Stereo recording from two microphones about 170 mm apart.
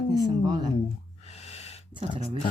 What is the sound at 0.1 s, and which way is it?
Speech, 20° right (ahead or behind).